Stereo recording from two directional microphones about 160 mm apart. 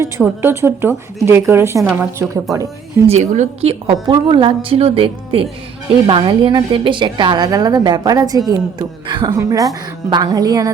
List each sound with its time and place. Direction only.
0.4 s a woman's voice: 15° right (ahead or behind)
3.1 s a woman's voice: 45° right (ahead or behind)
4.0 s a woman's voice: 30° right (ahead or behind)